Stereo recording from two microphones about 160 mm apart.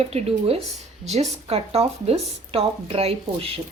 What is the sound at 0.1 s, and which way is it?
Speech, 40° right (ahead or behind).